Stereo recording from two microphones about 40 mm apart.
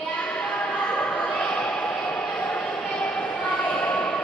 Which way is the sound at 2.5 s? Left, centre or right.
Left.